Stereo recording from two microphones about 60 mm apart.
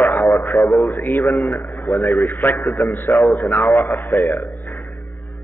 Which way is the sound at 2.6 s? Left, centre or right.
Centre.